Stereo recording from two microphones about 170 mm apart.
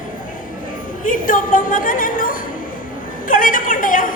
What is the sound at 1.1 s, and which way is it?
A woman's voice, 55° left (ahead or behind).